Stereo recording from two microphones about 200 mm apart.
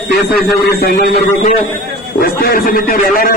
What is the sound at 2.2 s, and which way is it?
A man's voice, 50° left (ahead or behind).